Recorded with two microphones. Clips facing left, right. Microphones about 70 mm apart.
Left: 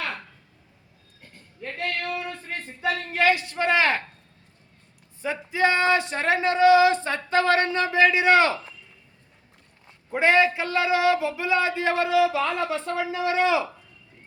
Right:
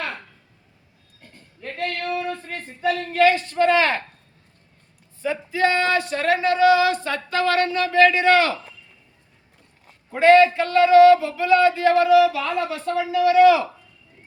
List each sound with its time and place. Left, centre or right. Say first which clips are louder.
2.8 s a woman's voice: right 4 dB; centre
5.2 s speech: right 2 dB; left
10.1 s speech: right 6 dB; centre